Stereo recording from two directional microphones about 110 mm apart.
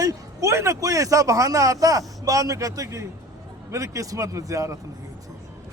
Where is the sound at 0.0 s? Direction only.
30° right (ahead or behind).